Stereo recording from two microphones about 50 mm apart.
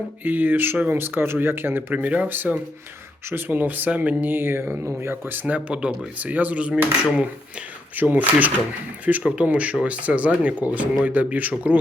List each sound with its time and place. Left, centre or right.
0.3 s speech: right
1.9 s speech: right
4.3 s speech: right; by 6.1 s centre
6.1 s speech: right
7.9 s speech: right